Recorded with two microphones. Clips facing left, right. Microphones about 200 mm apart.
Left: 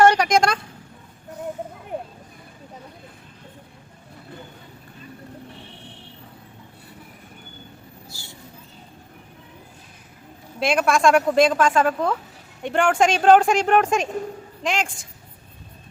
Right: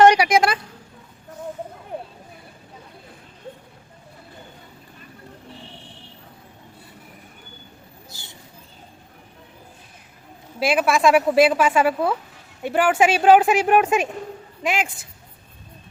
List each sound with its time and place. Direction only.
0.0 s speech: 10° right (ahead or behind)
8.1 s a sound: 20° right (ahead or behind)
10.6 s a woman's voice: 5° right (ahead or behind)